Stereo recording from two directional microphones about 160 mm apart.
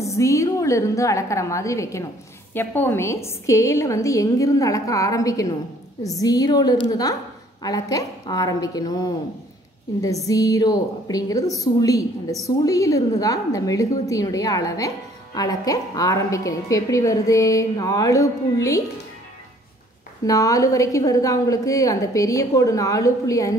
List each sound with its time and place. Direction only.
0.0 s a woman's voice: 20° left (ahead or behind)
20.2 s a woman's voice: 20° left (ahead or behind)